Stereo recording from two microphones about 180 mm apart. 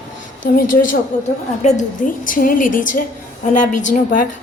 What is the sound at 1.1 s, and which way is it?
A woman's voice, 45° left (ahead or behind).